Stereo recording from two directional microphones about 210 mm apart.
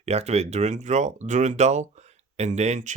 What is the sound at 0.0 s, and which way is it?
Speech, 30° right (ahead or behind).